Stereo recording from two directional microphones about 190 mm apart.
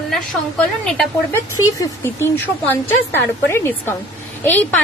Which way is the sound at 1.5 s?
15° left (ahead or behind).